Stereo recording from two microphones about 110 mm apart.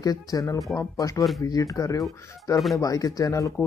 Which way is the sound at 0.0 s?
35° left (ahead or behind).